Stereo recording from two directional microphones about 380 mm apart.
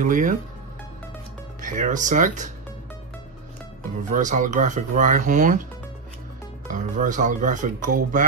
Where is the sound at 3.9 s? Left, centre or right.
Centre.